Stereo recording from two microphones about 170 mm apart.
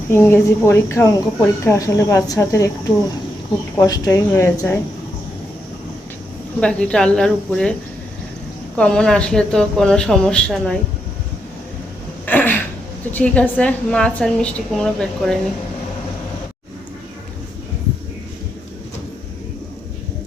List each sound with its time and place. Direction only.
0.1 s speech: 15° left (ahead or behind)
3.8 s speech: 20° left (ahead or behind)
6.6 s speech: 5° left (ahead or behind)
8.7 s speech: 5° left (ahead or behind)
12.2 s a sound: 10° left (ahead or behind)
13.1 s speech: 10° left (ahead or behind)